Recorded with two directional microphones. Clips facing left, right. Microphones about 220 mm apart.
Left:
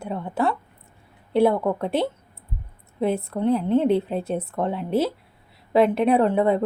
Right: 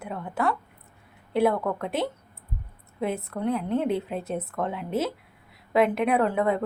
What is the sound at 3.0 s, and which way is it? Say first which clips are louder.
A woman's voice: left 5 dB; 30° left (ahead or behind).